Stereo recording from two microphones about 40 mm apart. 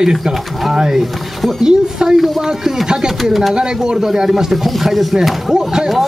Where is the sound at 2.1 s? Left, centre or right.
Centre.